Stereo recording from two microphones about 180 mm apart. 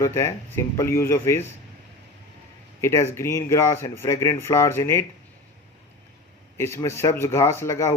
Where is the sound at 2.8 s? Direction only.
15° left (ahead or behind).